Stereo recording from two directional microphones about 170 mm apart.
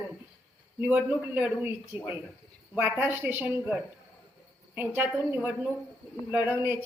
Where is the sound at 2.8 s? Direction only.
10° right (ahead or behind).